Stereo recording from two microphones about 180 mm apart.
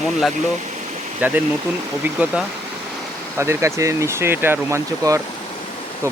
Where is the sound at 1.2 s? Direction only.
10° right (ahead or behind).